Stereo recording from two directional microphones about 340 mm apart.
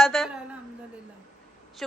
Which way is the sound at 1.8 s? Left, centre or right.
Centre.